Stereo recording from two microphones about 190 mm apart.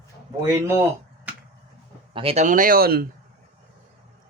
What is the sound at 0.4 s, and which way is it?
Speech, 15° right (ahead or behind).